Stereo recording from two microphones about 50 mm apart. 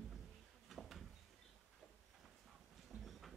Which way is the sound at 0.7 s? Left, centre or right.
Centre.